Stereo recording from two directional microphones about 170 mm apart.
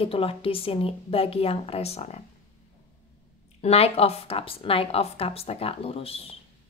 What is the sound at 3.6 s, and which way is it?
A woman's voice, 35° left (ahead or behind).